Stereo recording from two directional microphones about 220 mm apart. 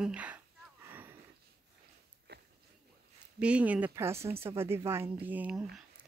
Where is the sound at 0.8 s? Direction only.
10° right (ahead or behind).